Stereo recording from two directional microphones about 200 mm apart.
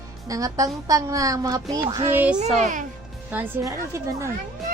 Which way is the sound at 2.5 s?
40° right (ahead or behind).